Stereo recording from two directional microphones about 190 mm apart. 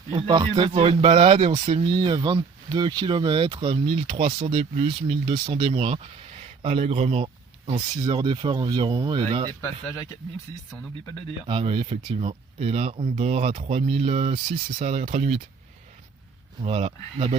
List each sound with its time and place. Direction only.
0.1 s speech: 25° right (ahead or behind)
9.6 s speech: 10° left (ahead or behind)
11.4 s speech: 25° right (ahead or behind)
16.6 s speech: 30° right (ahead or behind)